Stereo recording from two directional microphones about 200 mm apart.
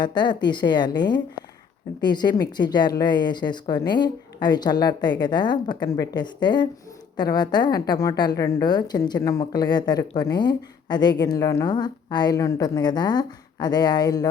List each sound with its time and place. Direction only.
0.0 s a woman's voice: 20° left (ahead or behind)